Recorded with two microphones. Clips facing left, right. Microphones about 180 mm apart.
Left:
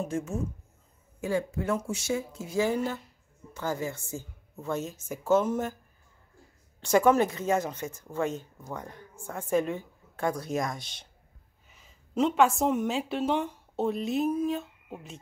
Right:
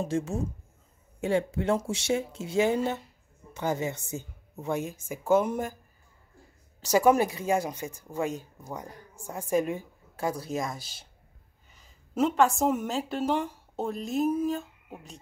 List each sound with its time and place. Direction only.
0.0 s speech: 30° right (ahead or behind); by 5.8 s 10° right (ahead or behind)
6.8 s a woman's voice: 5° right (ahead or behind)